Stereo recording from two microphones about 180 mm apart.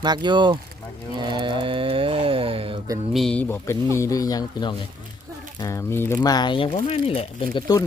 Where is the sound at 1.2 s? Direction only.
25° right (ahead or behind).